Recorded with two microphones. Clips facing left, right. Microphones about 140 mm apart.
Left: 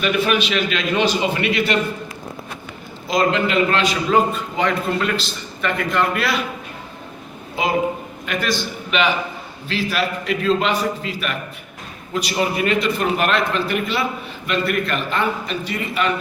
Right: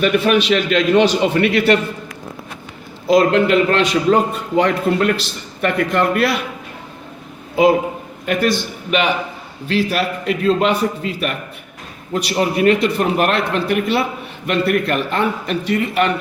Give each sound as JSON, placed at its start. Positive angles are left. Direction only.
{"t": 0.3, "sound": "a man's voice", "side_deg": -60}
{"t": 3.1, "sound": "a man's voice", "side_deg": -55}
{"t": 8.3, "sound": "a man's voice", "side_deg": -55}